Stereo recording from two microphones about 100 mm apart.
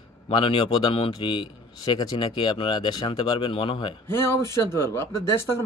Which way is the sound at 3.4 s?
65° left (ahead or behind).